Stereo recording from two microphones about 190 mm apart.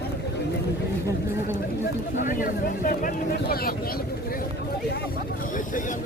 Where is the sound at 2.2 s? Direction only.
45° left (ahead or behind).